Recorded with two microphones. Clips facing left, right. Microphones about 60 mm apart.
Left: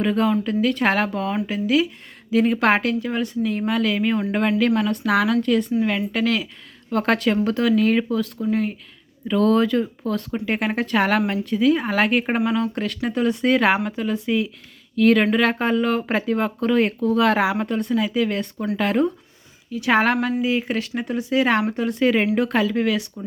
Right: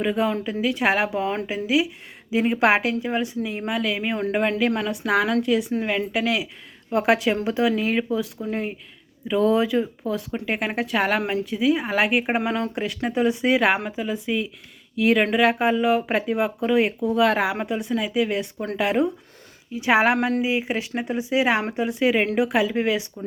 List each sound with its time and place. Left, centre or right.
0.0 s a woman's voice: centre
22.7 s speech: right